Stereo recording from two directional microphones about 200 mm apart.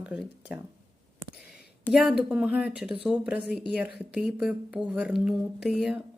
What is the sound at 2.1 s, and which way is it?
Speech, 5° right (ahead or behind).